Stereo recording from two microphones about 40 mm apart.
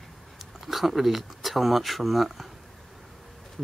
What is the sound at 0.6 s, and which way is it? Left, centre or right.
Speech, centre.